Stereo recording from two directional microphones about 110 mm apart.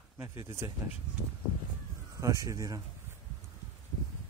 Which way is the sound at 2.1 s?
30° right (ahead or behind).